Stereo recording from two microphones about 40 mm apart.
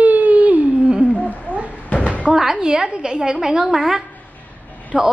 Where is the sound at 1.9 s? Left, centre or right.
Left.